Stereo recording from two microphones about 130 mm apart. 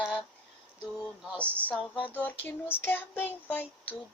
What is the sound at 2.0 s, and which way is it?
Child singing, 10° left (ahead or behind).